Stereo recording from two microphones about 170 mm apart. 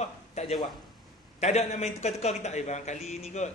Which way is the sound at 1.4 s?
40° left (ahead or behind).